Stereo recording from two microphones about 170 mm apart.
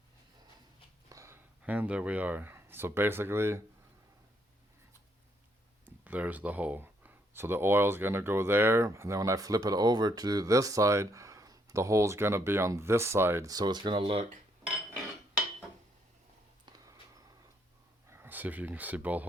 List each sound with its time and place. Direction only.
1.1 s speech: 15° right (ahead or behind)
5.8 s speech: 10° right (ahead or behind); by 14.3 s 30° right (ahead or behind)
16.6 s a sound: 20° right (ahead or behind)
18.1 s speech: 10° right (ahead or behind)